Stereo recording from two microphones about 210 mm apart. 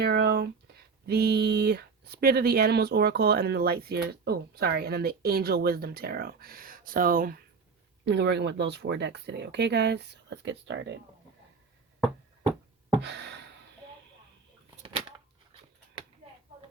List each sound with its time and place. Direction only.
0.0 s speech: 50° right (ahead or behind)
8.0 s speech: 55° right (ahead or behind)
13.0 s a sound: 55° right (ahead or behind)